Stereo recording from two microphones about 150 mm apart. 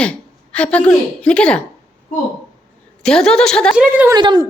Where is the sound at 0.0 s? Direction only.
10° left (ahead or behind).